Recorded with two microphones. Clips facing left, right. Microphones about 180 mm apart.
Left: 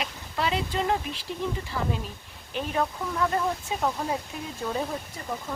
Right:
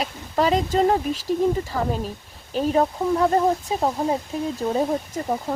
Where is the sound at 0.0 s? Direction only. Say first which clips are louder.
Right 8 dB; 40° right (ahead or behind).